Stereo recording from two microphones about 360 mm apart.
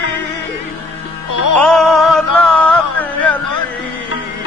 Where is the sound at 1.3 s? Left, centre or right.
Left.